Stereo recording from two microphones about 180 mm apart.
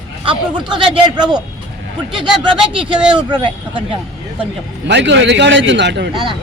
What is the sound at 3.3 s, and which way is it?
Speech, 25° right (ahead or behind).